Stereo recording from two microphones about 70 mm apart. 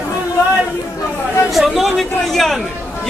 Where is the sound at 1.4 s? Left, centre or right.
Centre.